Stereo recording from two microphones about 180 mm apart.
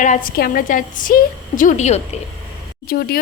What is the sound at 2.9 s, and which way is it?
Speech, 60° left (ahead or behind).